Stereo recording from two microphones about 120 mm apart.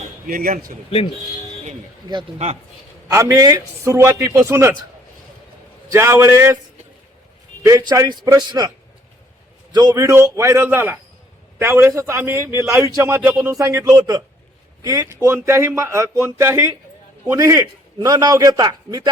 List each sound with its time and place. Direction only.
3.1 s a man's voice: 25° right (ahead or behind)
5.9 s a man's voice: 25° right (ahead or behind)
7.6 s a man's voice: 25° right (ahead or behind)
9.7 s a man's voice: 35° right (ahead or behind)